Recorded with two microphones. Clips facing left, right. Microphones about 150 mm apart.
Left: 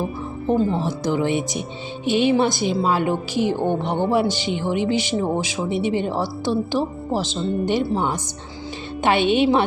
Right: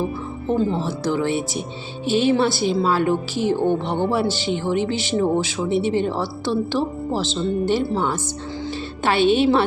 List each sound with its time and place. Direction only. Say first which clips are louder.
0.4 s speech: left 1 dB; 15° left (ahead or behind)